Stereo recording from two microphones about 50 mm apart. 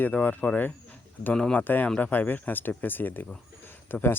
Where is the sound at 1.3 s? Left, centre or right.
Centre.